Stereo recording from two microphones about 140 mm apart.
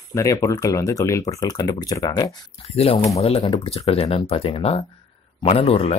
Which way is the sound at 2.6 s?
45° left (ahead or behind).